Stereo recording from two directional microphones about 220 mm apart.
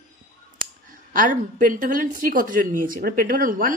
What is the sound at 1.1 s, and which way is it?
Speech, 40° right (ahead or behind).